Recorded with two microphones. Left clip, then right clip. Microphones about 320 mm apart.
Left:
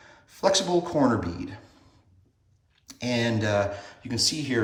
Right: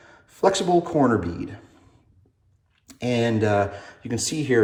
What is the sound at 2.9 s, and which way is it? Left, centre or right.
Speech, centre.